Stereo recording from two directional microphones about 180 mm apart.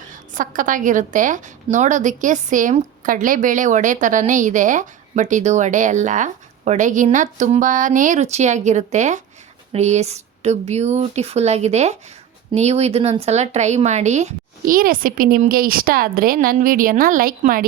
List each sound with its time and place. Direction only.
0.1 s a woman's voice: 45° right (ahead or behind)